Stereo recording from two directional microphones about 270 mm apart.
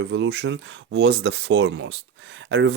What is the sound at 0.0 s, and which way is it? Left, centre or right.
Speech, right.